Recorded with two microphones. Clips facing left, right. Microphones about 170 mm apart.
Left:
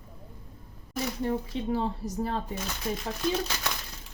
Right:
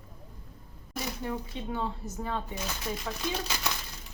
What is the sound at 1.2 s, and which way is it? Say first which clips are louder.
Speech: left 8 dB; 35° left (ahead or behind).